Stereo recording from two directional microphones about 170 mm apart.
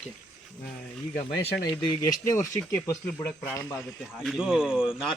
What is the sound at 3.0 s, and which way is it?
Speech, 10° left (ahead or behind).